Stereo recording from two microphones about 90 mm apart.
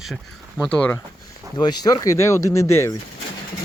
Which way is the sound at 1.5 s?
50° left (ahead or behind).